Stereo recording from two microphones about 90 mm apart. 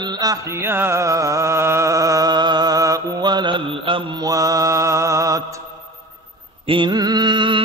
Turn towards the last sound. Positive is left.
turn(degrees=-60)  # may be behind; listen again after turning